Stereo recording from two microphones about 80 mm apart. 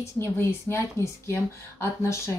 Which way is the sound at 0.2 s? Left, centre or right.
Left.